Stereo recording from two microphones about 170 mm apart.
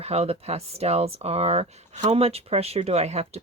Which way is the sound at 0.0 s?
35° right (ahead or behind).